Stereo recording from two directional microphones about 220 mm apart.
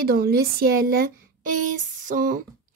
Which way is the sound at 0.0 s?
45° right (ahead or behind).